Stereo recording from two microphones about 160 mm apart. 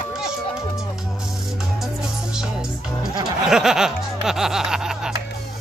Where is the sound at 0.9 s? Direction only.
5° right (ahead or behind).